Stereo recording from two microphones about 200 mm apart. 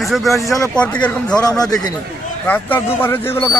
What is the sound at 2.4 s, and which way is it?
Speech, 10° left (ahead or behind).